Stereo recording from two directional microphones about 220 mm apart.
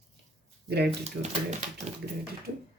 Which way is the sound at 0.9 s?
30° right (ahead or behind).